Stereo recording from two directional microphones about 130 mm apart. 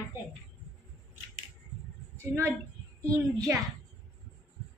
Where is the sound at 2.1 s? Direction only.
20° right (ahead or behind).